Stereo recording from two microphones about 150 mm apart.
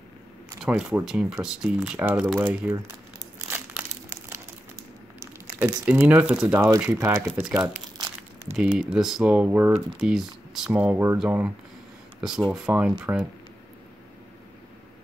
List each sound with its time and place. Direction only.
0.6 s speech: 5° right (ahead or behind)
3.5 s crumpling: 15° right (ahead or behind)
5.2 s speech: 15° right (ahead or behind)
6.4 s speech: 20° right (ahead or behind)
7.2 s speech: 10° right (ahead or behind)